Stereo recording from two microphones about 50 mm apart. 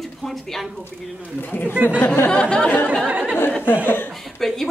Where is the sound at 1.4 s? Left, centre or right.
Left.